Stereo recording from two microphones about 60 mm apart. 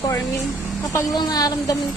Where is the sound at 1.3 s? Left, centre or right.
Left.